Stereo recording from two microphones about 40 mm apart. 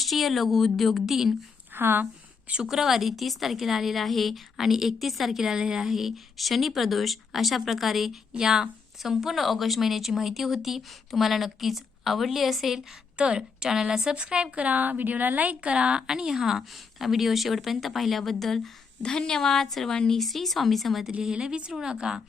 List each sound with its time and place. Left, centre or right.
0.0 s speech: centre
1.7 s a woman's voice: right
2.6 s a woman's voice: centre
5.4 s speech: centre
13.1 s a woman's voice: right
16.0 s speech: centre
19.0 s a woman's voice: centre
19.9 s a woman's voice: centre
20.1 s speech: centre
21.2 s a woman's voice: centre